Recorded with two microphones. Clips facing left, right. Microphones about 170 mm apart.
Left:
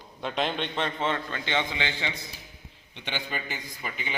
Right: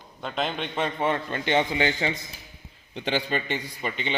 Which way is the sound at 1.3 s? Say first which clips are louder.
Right 6 dB; 45° right (ahead or behind).